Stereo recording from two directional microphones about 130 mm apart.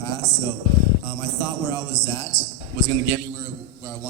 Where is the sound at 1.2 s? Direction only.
30° left (ahead or behind).